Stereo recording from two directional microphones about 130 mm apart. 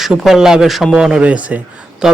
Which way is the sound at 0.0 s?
5° right (ahead or behind).